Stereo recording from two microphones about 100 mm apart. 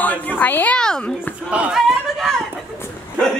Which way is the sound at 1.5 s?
10° right (ahead or behind).